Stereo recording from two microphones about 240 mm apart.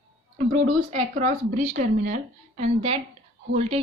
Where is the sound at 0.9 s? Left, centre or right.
Right.